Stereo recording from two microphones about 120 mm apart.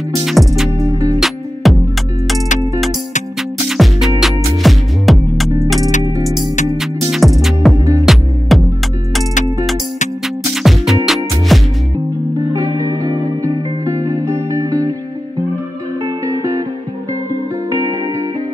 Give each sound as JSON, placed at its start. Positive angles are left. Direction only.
{"t": 0.2, "sound": "music", "side_deg": 0}
{"t": 0.7, "sound": "music", "side_deg": -30}
{"t": 1.2, "sound": "music", "side_deg": 0}
{"t": 3.6, "sound": "music", "side_deg": 0}
{"t": 6.8, "sound": "music", "side_deg": 0}
{"t": 10.5, "sound": "music", "side_deg": 0}
{"t": 12.5, "sound": "music", "side_deg": -30}
{"t": 16.3, "sound": "music", "side_deg": -30}
{"t": 17.6, "sound": "music", "side_deg": -30}